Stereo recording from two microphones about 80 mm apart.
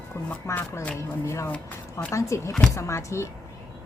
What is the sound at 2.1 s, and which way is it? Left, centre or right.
Speech, left.